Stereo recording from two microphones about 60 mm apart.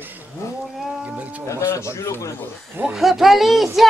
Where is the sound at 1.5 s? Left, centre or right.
Left.